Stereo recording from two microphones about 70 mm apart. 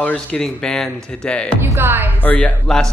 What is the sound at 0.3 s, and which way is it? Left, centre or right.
Speech, centre.